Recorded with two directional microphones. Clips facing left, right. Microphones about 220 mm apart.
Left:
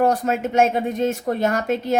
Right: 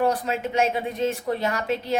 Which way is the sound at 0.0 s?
45° left (ahead or behind).